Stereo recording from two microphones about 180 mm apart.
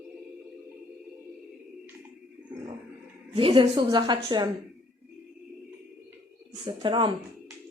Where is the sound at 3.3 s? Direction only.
30° right (ahead or behind).